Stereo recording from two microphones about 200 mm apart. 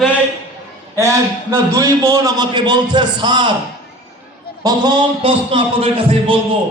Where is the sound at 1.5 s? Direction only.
15° right (ahead or behind).